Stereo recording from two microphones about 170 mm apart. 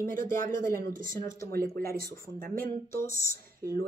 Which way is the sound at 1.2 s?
20° left (ahead or behind).